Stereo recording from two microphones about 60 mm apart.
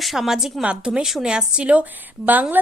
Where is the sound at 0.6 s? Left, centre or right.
Centre.